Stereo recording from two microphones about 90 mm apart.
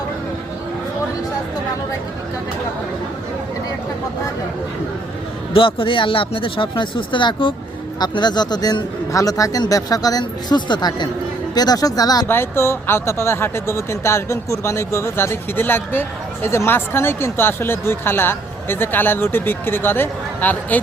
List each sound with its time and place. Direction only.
5.5 s speech: 80° left
7.9 s a man's voice: 50° left (ahead or behind)
12.3 s speech: 25° left (ahead or behind)